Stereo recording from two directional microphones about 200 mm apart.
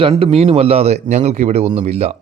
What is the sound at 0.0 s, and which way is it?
Speech, 30° right (ahead or behind).